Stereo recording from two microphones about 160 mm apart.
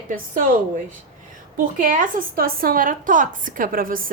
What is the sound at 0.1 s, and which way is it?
A woman's voice, 55° right (ahead or behind).